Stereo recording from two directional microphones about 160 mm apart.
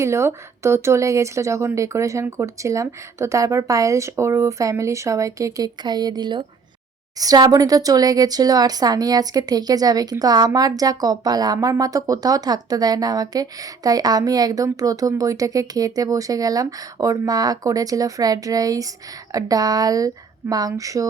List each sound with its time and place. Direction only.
0.0 s speech: 15° right (ahead or behind)